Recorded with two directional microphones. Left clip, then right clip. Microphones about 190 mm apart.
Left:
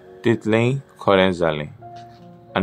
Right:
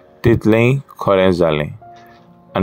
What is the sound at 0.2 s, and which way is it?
Speech, 30° right (ahead or behind).